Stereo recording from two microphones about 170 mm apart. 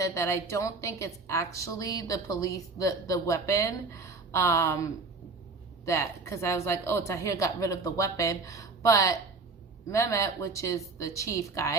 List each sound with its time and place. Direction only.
0.0 s a woman's voice: 15° left (ahead or behind)